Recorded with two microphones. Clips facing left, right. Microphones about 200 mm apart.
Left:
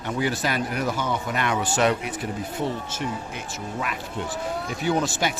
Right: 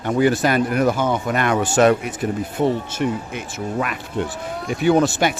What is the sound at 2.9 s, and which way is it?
Speech, 60° right (ahead or behind).